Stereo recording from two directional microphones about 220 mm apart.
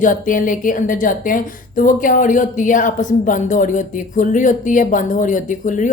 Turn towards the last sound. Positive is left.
turn(degrees=35)  # may be behind; listen again after turning